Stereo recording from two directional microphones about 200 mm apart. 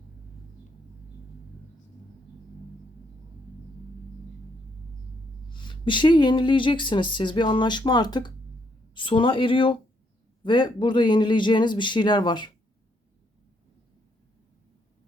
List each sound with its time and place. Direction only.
5.5 s speech: 25° left (ahead or behind)